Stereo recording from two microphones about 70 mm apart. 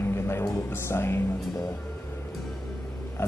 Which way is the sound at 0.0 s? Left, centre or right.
Left.